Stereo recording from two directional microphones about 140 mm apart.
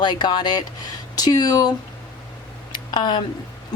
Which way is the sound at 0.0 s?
35° left (ahead or behind).